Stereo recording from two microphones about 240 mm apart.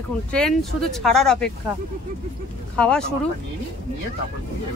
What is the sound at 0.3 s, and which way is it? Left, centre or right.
Speech, centre.